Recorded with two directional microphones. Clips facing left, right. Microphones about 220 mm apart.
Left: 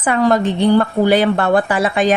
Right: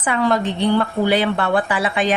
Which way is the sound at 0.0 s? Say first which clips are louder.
Left 4 dB; 45° left (ahead or behind).